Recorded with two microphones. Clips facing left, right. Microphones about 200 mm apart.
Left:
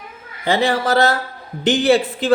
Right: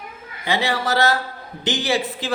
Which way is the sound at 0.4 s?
50° left (ahead or behind).